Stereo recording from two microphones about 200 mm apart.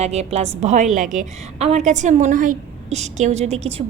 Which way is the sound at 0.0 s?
30° right (ahead or behind).